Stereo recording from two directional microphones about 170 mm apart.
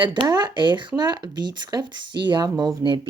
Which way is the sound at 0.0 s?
25° right (ahead or behind).